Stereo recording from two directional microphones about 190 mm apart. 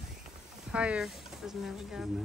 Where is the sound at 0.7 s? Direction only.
5° right (ahead or behind).